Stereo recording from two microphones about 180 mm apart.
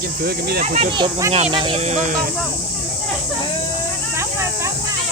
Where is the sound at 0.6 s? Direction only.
35° right (ahead or behind).